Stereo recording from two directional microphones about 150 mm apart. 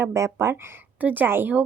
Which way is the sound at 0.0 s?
20° right (ahead or behind).